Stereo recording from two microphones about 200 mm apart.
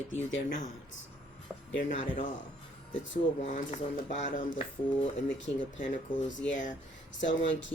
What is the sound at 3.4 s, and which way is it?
Speech, 35° left (ahead or behind).